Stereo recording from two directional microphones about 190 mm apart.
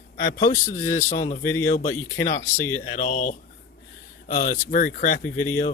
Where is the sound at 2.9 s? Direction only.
40° left (ahead or behind).